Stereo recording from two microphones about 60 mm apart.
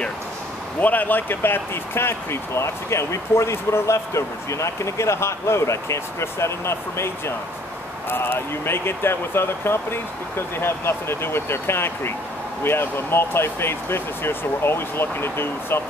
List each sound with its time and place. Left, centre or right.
0.7 s speech: left